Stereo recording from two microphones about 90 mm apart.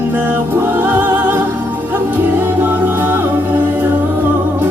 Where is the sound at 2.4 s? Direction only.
25° right (ahead or behind).